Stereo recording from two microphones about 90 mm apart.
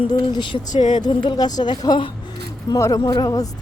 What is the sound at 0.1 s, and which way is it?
Speech, 55° left (ahead or behind).